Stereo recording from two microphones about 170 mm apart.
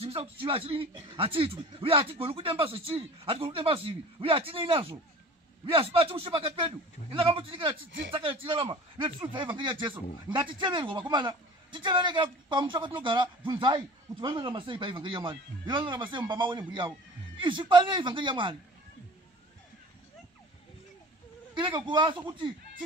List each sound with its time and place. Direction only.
0.0 s a man's voice: 35° right (ahead or behind)
21.5 s a man's voice: 30° right (ahead or behind)